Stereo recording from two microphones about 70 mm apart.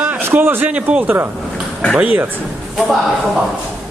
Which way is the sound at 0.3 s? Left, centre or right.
Right.